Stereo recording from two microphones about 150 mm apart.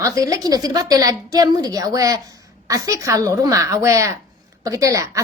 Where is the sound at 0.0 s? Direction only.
25° right (ahead or behind).